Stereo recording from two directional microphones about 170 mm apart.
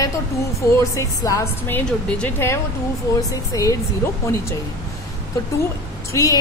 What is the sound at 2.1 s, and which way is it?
A woman's voice, 10° left (ahead or behind).